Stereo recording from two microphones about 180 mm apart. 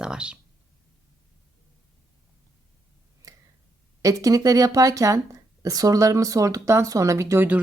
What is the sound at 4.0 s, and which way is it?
Speech, 15° right (ahead or behind).